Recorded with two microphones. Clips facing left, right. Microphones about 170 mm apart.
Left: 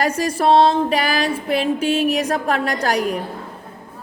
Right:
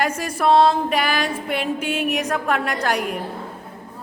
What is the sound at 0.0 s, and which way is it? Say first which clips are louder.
A woman's voice: left 3 dB; 35° left (ahead or behind).